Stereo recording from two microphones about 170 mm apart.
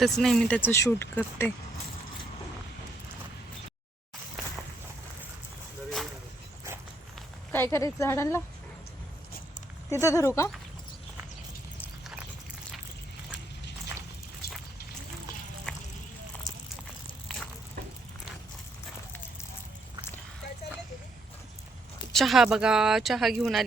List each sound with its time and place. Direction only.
0.0 s speech: centre (ahead or behind)
7.5 s speech: 15° left (ahead or behind)
9.9 s speech: 15° left (ahead or behind)
14.4 s a sound: 65° left (ahead or behind)
15.7 s vehicle: 5° left (ahead or behind)
17.2 s a sound: centre (ahead or behind)
22.1 s speech: centre (ahead or behind)